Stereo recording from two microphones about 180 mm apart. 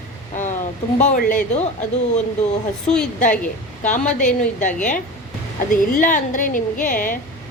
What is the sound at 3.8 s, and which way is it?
Speech, 45° left (ahead or behind).